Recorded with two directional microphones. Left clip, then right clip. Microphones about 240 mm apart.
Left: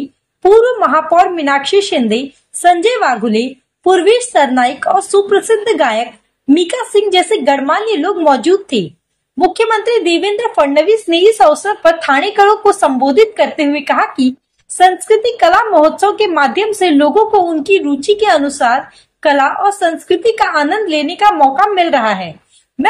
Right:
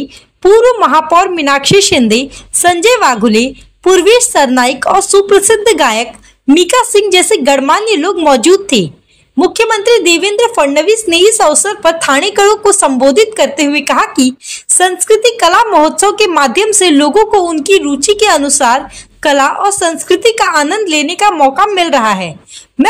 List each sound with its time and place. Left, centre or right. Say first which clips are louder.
0.4 s a woman's voice: right 2 dB; right